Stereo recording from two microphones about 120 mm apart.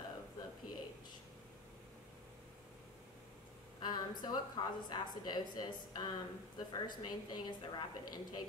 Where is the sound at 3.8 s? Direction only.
35° left (ahead or behind).